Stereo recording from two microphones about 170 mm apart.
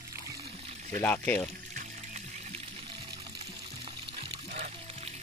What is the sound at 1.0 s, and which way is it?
Speech, 10° left (ahead or behind).